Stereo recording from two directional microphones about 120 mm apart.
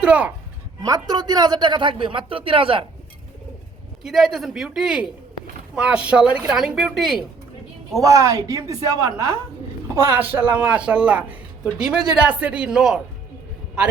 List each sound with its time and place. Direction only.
0.0 s a man's voice: 10° right (ahead or behind)
0.8 s a man's voice: 35° right (ahead or behind)
4.0 s a man's voice: 5° right (ahead or behind)
7.9 s a man's voice: 25° right (ahead or behind); by 13.0 s 5° right (ahead or behind)